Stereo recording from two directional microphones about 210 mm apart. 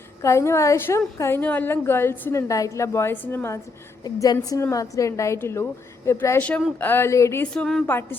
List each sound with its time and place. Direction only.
0.2 s a woman's voice: 15° left (ahead or behind)